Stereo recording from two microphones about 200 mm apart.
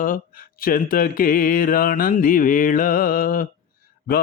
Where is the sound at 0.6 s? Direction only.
45° left (ahead or behind).